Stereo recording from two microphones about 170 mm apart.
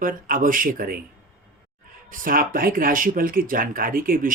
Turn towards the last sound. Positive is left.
turn(degrees=-55)  # may be behind; listen again after turning